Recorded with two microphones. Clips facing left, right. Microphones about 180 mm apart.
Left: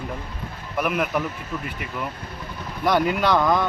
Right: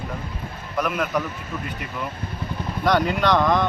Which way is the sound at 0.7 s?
10° left (ahead or behind).